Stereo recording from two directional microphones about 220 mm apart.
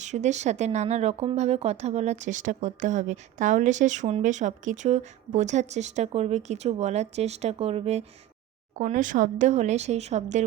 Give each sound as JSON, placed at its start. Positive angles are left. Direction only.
{"t": 0.0, "sound": "speech", "side_deg": -30}